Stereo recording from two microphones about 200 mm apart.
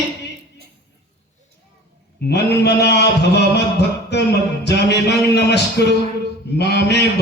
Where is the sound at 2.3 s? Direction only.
55° left (ahead or behind).